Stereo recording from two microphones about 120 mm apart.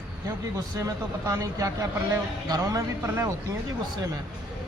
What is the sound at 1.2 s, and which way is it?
A woman's voice, 25° right (ahead or behind).